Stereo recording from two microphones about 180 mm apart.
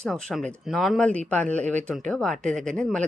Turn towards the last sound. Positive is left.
turn(degrees=5)  # may be behind; listen again after turning